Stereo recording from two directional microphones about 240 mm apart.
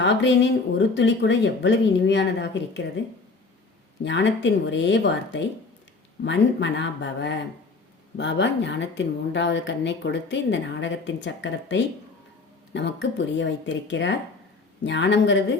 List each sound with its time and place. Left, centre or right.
0.0 s speech: left
4.0 s speech: left